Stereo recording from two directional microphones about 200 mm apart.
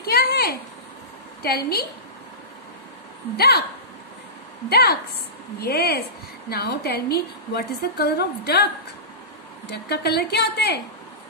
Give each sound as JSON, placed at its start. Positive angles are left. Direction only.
{"t": 0.0, "sound": "a sound", "side_deg": 50}
{"t": 1.4, "sound": "a woman's voice", "side_deg": 50}
{"t": 3.3, "sound": "a woman's voice", "side_deg": 50}
{"t": 4.6, "sound": "a woman's voice", "side_deg": 50}
{"t": 9.7, "sound": "a woman's voice", "side_deg": 55}